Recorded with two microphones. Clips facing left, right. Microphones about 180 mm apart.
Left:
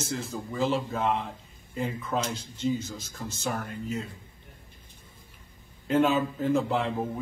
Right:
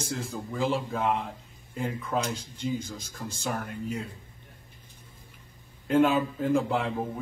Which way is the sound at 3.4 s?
Centre (ahead or behind).